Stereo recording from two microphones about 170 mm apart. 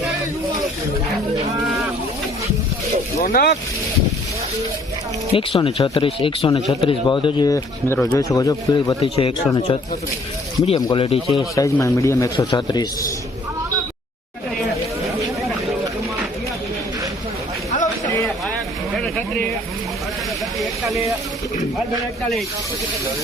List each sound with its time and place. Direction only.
3.2 s speech: 60° left (ahead or behind)
5.3 s a man's voice: 30° left (ahead or behind)
9.0 s speech: 35° left (ahead or behind)
10.8 s speech: 30° left (ahead or behind)
11.5 s a man's voice: 20° left (ahead or behind)
17.7 s vehicle: 45° left (ahead or behind)
19.0 s a sound: 5° left (ahead or behind)
20.6 s hiss: centre (ahead or behind)